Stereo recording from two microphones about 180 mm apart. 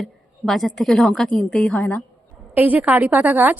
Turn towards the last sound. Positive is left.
turn(degrees=-10)  # may be behind; listen again after turning